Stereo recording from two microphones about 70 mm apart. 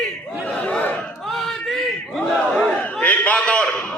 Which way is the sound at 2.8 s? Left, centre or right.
Centre.